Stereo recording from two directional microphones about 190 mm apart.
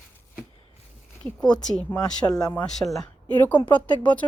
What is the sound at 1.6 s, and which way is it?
Speech, 5° left (ahead or behind).